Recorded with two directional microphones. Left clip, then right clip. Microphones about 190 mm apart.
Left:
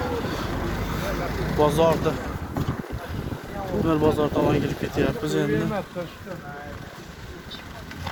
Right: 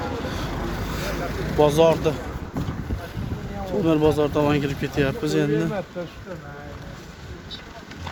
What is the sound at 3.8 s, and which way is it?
Speech, 55° right (ahead or behind).